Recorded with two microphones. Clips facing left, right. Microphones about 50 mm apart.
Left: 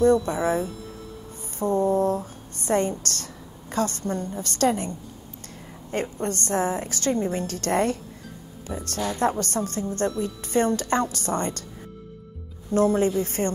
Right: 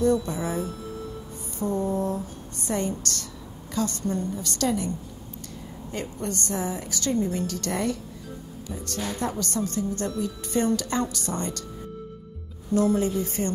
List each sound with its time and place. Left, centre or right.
0.0 s a woman's voice: left
12.7 s a woman's voice: left